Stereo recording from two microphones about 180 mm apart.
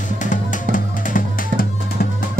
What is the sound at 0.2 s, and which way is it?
Music, 45° left (ahead or behind).